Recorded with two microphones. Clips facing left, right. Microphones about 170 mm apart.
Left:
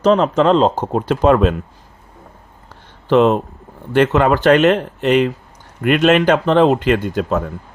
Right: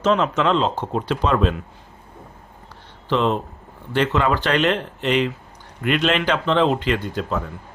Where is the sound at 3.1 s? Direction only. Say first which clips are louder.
Left 8 dB; 50° left (ahead or behind).